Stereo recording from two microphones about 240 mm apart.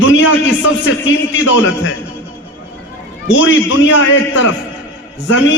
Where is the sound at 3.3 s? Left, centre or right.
Left.